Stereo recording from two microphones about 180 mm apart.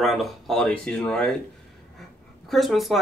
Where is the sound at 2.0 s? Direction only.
Centre (ahead or behind).